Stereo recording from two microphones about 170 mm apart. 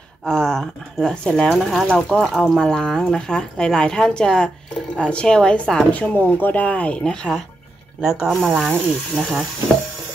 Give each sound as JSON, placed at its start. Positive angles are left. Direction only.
{"t": 0.2, "sound": "speech", "side_deg": 5}